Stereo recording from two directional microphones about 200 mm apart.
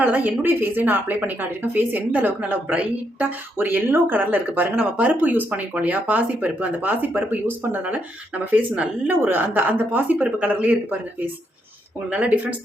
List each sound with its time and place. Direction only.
0.0 s a woman's voice: 10° right (ahead or behind)
12.1 s a woman's voice: 5° right (ahead or behind)